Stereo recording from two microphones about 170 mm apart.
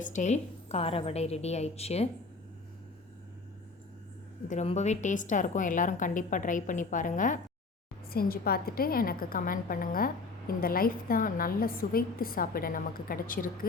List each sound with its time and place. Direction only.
0.0 s a woman's voice: 45° left (ahead or behind)
4.4 s a woman's voice: 40° left (ahead or behind)
8.1 s a woman's voice: 60° left (ahead or behind)